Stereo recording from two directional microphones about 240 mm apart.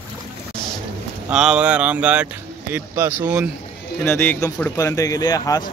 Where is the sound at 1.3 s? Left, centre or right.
Centre.